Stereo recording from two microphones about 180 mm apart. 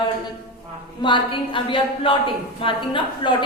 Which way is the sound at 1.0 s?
25° left (ahead or behind).